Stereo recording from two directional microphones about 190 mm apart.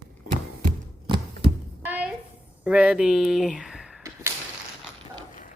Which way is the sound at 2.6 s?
5° right (ahead or behind).